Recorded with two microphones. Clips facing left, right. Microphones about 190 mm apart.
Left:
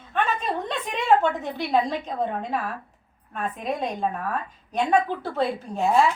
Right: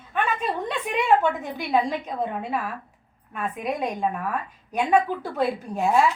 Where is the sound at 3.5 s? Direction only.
10° right (ahead or behind).